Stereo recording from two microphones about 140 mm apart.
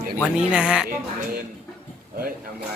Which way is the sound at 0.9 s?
90° right.